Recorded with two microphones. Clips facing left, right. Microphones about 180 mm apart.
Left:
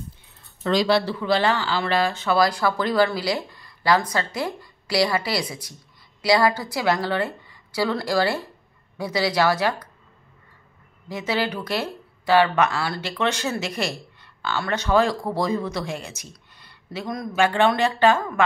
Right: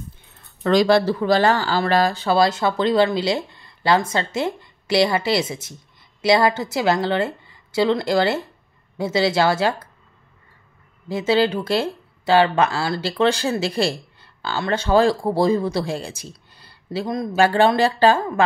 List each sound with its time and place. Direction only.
0.7 s speech: 50° right (ahead or behind); by 9.8 s 25° right (ahead or behind)
11.1 s speech: 30° right (ahead or behind)